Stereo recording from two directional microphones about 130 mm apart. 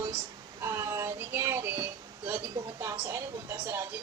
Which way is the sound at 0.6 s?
20° right (ahead or behind).